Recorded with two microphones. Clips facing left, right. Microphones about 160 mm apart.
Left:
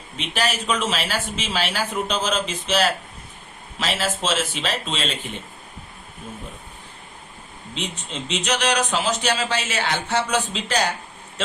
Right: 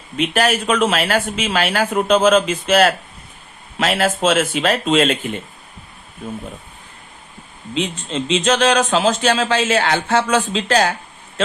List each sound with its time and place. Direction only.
0.2 s speech: 55° right (ahead or behind)
7.8 s speech: 90° right; by 10.8 s 75° right (ahead or behind)